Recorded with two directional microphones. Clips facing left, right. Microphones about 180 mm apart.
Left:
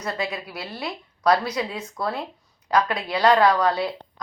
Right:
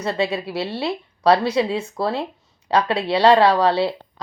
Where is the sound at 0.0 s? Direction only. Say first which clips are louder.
Right 6 dB; 30° right (ahead or behind).